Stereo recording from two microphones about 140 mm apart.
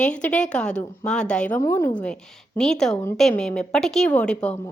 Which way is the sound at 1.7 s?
20° left (ahead or behind).